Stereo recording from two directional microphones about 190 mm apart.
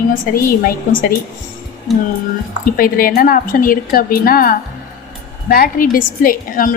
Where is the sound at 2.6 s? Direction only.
50° left (ahead or behind).